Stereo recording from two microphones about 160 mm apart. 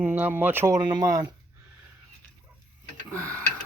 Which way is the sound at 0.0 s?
10° right (ahead or behind).